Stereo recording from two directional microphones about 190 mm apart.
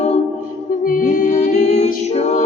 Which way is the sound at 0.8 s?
40° left (ahead or behind).